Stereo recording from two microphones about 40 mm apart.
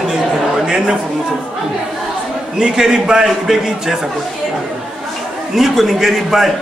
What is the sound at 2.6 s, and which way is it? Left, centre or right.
A man's voice, centre.